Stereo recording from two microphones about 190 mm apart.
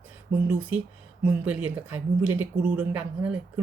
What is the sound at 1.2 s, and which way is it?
Speech, 5° right (ahead or behind).